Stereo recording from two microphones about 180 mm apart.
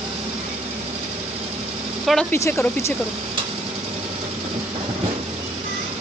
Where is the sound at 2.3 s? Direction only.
15° left (ahead or behind).